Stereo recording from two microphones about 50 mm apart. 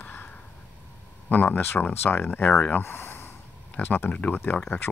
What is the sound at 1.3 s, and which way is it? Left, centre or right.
Speech, left.